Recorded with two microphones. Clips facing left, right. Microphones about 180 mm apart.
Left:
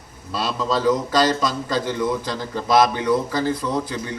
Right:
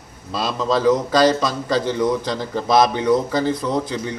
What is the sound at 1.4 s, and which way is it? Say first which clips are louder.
A man's voice: right 2 dB; 20° right (ahead or behind).